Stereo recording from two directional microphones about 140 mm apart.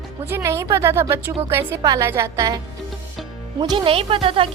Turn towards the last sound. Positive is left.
turn(degrees=-40)  # may be behind; listen again after turning